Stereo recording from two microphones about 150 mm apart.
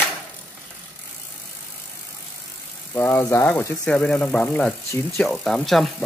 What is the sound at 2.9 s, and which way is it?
Speech, 15° left (ahead or behind).